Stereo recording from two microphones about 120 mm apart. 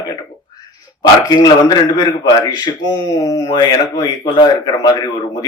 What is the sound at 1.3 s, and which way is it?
Speech, 35° left (ahead or behind).